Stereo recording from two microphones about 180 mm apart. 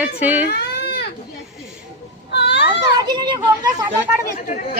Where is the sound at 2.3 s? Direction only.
70° left (ahead or behind).